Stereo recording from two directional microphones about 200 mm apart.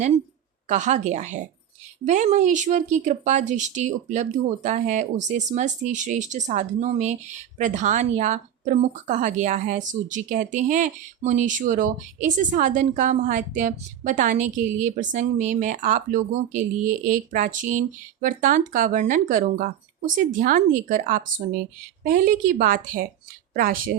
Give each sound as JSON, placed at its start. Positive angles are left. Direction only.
{"t": 0.7, "sound": "a woman's voice", "side_deg": -35}